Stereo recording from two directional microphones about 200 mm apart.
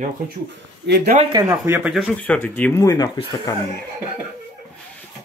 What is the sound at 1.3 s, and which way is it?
Speech, 15° right (ahead or behind).